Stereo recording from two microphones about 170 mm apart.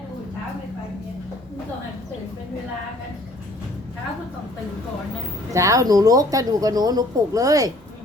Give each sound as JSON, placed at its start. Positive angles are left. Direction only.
{"t": 5.5, "sound": "speech", "side_deg": -20}